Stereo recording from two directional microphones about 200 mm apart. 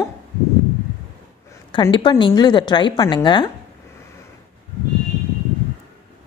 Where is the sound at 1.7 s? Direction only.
25° left (ahead or behind).